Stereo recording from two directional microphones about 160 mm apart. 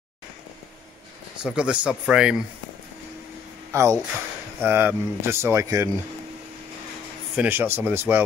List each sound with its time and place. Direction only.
1.4 s speech: 5° right (ahead or behind)
3.7 s speech: 20° right (ahead or behind)
7.3 s speech: 10° right (ahead or behind)